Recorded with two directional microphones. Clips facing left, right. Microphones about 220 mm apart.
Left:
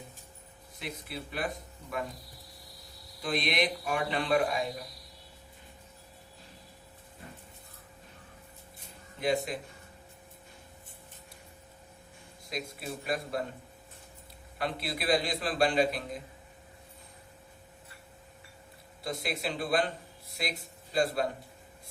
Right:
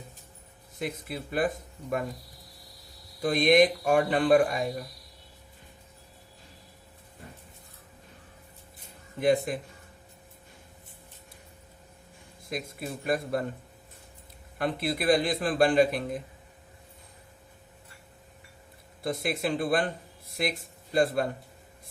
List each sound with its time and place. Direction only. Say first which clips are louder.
0.8 s a man's voice: right 6 dB; 50° right (ahead or behind)
3.2 s a man's voice: right 10 dB; 50° right (ahead or behind)
9.2 s a man's voice: right 5 dB; 50° right (ahead or behind)
12.5 s a man's voice: right 3 dB; 50° right (ahead or behind)
14.6 s a man's voice: right 6 dB; 50° right (ahead or behind)
19.0 s a man's voice: right 5 dB; 50° right (ahead or behind)